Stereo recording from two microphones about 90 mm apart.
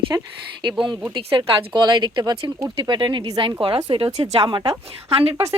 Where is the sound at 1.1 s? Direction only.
60° right (ahead or behind).